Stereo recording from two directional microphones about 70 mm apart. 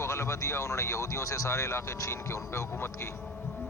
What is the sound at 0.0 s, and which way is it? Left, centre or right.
Speech, left.